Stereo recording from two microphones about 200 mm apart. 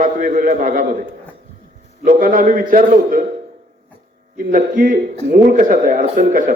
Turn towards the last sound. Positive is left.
turn(degrees=-40)  # may be behind; listen again after turning